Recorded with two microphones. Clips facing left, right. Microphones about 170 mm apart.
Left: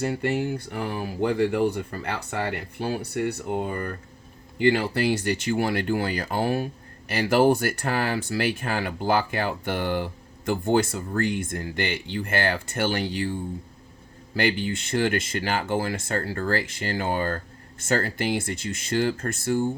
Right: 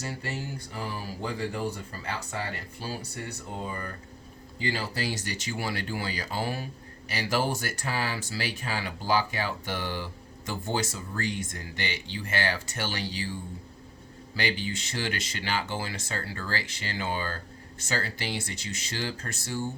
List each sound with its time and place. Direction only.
0.0 s speech: 60° left (ahead or behind)